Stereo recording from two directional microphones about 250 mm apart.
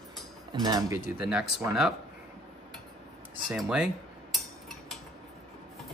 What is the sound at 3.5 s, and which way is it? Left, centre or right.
Cutlery, centre.